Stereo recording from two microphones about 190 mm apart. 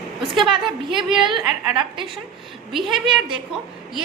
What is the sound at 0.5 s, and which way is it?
Speech, 25° right (ahead or behind).